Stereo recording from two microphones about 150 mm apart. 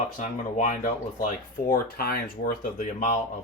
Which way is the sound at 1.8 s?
85° left.